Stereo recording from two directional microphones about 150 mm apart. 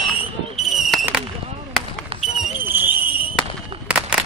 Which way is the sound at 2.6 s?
15° right (ahead or behind).